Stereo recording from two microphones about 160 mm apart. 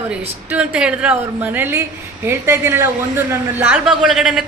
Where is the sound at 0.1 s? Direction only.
5° right (ahead or behind).